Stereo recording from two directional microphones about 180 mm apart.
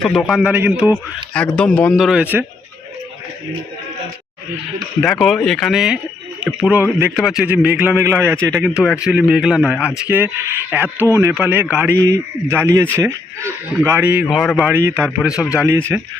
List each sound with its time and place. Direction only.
0.0 s a man's voice: centre (ahead or behind)
1.3 s a man's voice: 5° left (ahead or behind)
5.2 s a man's voice: centre (ahead or behind)
14.7 s a man's voice: 15° right (ahead or behind)
15.3 s speech: 20° left (ahead or behind)
15.5 s a man's voice: 15° right (ahead or behind)